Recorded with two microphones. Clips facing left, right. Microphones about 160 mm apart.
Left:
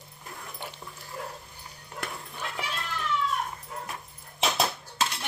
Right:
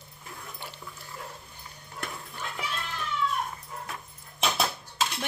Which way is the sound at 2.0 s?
55° left (ahead or behind).